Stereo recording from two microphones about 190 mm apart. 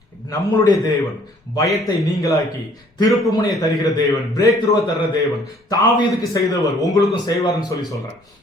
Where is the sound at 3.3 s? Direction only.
20° left (ahead or behind).